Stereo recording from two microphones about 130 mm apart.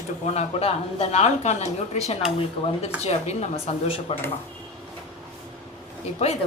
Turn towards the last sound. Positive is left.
turn(degrees=55)  # may be behind; listen again after turning